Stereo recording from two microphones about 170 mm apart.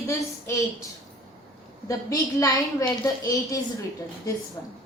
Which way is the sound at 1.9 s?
20° left (ahead or behind).